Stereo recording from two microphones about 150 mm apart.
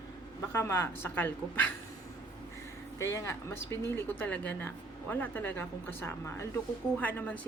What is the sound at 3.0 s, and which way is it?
Speech, 20° left (ahead or behind).